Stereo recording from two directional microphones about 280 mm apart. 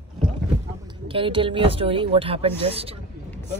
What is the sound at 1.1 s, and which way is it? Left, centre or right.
Speech, centre.